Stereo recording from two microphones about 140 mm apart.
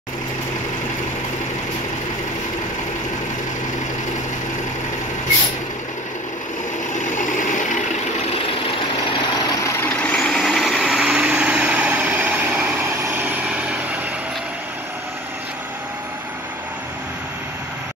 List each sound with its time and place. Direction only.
7.0 s vehicle: 65° left (ahead or behind)
9.8 s vehicle: 10° left (ahead or behind); by 13.7 s 10° right (ahead or behind)